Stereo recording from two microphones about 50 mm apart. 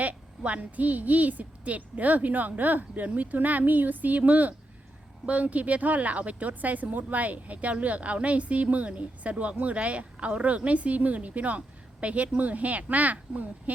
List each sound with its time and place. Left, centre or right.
0.0 s a woman's voice: right